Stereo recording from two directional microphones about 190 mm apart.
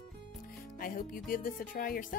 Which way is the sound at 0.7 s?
50° left (ahead or behind).